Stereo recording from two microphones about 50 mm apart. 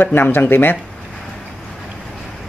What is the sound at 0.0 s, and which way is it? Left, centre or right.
Speech, left.